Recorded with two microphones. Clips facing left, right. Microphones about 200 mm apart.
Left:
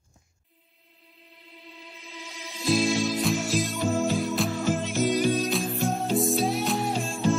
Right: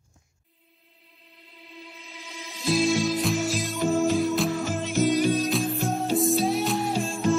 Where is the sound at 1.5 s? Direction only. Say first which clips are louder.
Right 2 dB; 15° left (ahead or behind).